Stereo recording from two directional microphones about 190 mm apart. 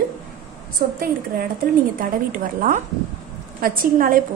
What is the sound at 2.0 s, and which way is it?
A woman's voice, 45° right (ahead or behind).